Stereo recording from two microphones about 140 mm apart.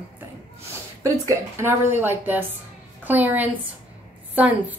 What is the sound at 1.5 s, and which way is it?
Speech, 15° right (ahead or behind).